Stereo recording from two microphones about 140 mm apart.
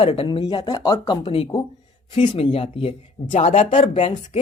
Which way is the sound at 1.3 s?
45° left (ahead or behind).